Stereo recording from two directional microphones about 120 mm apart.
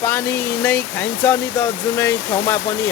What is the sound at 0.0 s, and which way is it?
Speech, 15° left (ahead or behind).